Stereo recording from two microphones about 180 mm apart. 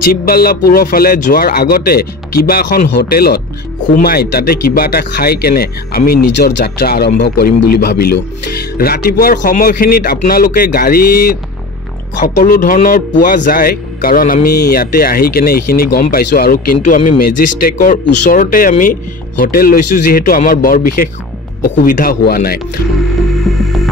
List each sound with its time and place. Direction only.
0.1 s a man's voice: 55° left (ahead or behind)
23.5 s music: centre (ahead or behind)